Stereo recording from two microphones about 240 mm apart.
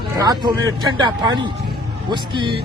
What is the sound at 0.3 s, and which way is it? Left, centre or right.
Speech, centre.